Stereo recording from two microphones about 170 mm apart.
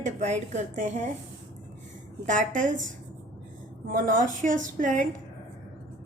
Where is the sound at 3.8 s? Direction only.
55° right (ahead or behind).